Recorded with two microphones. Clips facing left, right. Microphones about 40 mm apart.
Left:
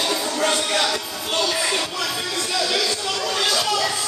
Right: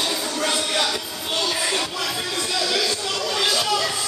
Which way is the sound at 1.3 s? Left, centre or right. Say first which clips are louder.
Left 2 dB; centre.